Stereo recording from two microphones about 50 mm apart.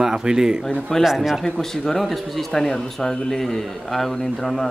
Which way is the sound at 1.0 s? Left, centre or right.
Centre.